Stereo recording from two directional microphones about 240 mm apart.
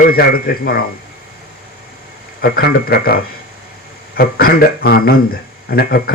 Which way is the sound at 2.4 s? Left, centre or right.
Left.